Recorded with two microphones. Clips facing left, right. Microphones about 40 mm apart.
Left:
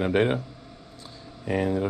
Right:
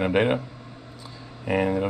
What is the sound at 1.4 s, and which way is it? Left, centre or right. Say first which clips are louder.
Speech: right 2 dB; right.